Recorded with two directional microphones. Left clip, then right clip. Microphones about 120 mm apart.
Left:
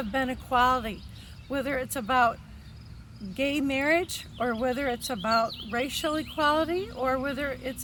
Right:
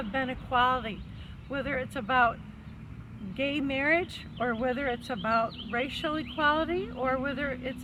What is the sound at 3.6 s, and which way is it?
Speech, 40° left (ahead or behind).